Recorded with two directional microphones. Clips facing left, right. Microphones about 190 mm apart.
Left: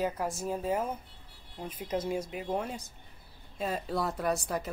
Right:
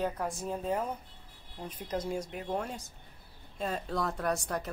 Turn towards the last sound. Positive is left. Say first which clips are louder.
# left 1 dB
turn(degrees=5)  # may be behind; listen again after turning